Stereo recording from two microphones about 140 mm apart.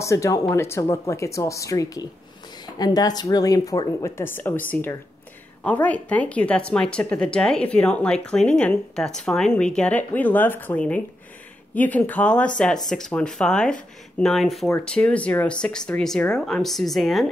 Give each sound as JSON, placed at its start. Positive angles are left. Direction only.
{"t": 0.0, "sound": "speech", "side_deg": 20}